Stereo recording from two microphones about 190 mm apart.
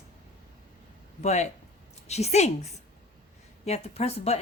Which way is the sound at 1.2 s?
35° left (ahead or behind).